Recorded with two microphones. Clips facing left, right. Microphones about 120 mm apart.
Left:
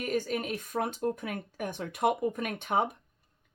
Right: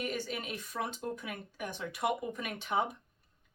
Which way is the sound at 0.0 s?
45° left (ahead or behind).